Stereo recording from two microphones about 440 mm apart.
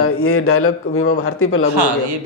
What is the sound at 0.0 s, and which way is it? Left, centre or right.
A man's voice, left.